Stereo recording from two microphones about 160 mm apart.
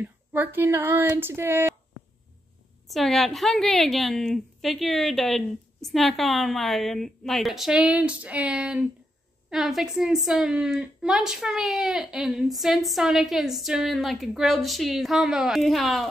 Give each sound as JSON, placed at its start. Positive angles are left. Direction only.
{"t": 0.0, "sound": "speech", "side_deg": -10}
{"t": 2.9, "sound": "a woman's voice", "side_deg": 0}